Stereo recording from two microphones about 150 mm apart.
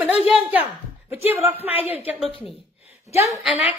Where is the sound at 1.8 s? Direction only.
10° right (ahead or behind).